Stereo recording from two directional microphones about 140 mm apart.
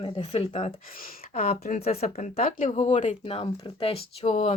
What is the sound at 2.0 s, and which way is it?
Speech, 70° left (ahead or behind).